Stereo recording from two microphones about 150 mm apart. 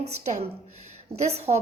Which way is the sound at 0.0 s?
45° right (ahead or behind).